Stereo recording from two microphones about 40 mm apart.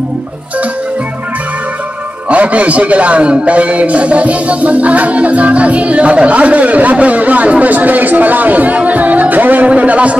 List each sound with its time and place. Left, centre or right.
2.2 s a man's voice: right
9.7 s a man's voice: right